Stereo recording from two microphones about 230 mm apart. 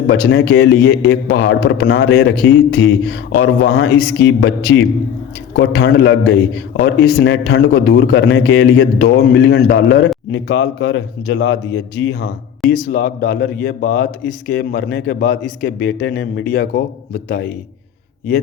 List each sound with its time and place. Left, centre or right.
0.1 s a man's voice: left
12.7 s a man's voice: left